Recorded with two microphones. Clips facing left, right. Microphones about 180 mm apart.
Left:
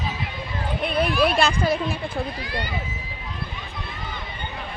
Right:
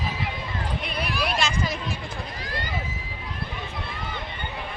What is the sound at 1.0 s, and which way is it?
Speech, 55° left (ahead or behind).